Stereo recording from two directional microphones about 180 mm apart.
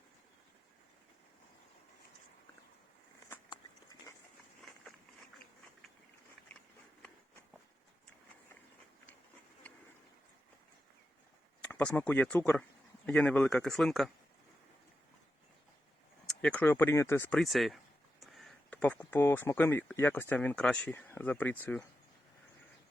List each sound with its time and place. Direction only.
3.5 s a sound: 20° left (ahead or behind)
11.7 s speech: 5° left (ahead or behind)
16.2 s speech: 5° left (ahead or behind)